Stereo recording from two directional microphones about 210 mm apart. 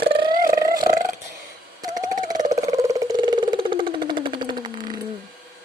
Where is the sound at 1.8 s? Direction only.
20° right (ahead or behind).